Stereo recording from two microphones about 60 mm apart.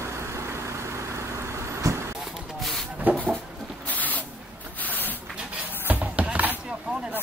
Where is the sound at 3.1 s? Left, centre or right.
Right.